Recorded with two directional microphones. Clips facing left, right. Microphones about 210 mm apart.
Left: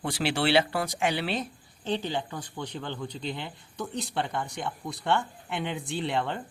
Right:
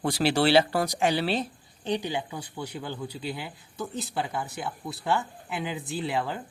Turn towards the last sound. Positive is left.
turn(degrees=-5)  # may be behind; listen again after turning